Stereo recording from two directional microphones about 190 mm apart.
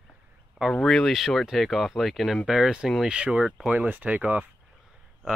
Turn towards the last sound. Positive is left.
turn(degrees=-5)  # may be behind; listen again after turning